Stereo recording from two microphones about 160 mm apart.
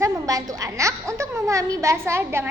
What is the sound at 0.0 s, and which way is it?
A woman's voice, 20° right (ahead or behind).